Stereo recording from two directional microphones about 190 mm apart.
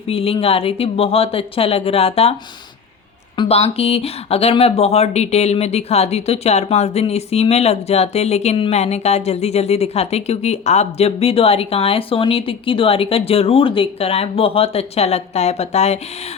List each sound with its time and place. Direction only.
0.1 s speech: 30° left (ahead or behind)
3.3 s speech: 30° left (ahead or behind)